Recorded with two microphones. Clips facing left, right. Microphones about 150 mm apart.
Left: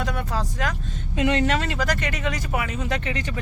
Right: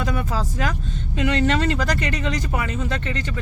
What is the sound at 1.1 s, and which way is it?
Speech, 20° left (ahead or behind).